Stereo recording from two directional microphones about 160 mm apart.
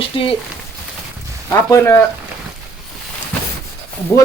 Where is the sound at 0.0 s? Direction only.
35° left (ahead or behind).